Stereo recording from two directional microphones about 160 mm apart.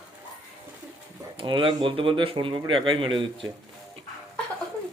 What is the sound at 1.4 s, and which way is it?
Speech, 30° right (ahead or behind).